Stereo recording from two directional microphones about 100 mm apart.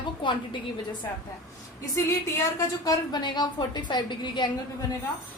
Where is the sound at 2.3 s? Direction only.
30° left (ahead or behind).